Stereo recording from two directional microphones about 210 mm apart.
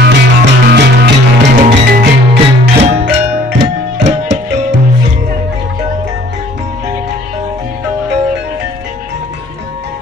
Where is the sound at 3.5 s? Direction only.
55° right (ahead or behind).